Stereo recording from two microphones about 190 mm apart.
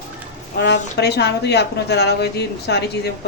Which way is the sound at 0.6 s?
65° left (ahead or behind).